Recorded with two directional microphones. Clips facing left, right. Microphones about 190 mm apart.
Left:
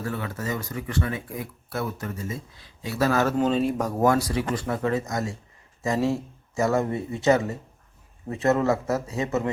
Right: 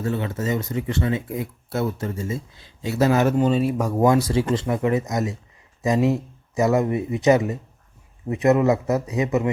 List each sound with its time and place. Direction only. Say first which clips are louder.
0.0 s speech: right 5 dB; 25° right (ahead or behind)
3.3 s speech: right 3 dB; 5° right (ahead or behind)